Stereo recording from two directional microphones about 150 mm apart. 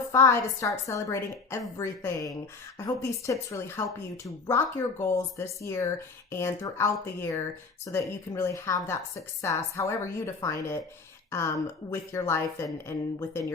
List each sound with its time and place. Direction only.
0.1 s a woman's voice: 20° left (ahead or behind)